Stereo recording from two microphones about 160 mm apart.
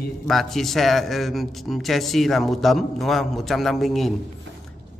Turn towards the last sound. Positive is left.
turn(degrees=0)  # may be behind; listen again after turning